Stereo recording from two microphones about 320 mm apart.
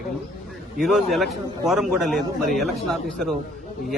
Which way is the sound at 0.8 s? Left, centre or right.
Centre.